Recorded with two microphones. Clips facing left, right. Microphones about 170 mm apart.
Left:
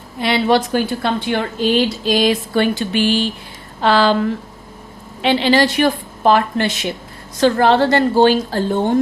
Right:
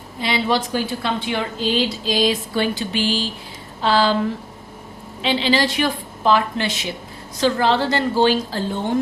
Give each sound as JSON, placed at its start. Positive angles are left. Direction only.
{"t": 0.2, "sound": "a woman's voice", "side_deg": 60}
{"t": 5.2, "sound": "a woman's voice", "side_deg": 60}